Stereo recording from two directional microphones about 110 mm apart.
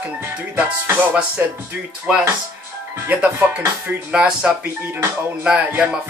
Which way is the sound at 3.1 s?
15° right (ahead or behind).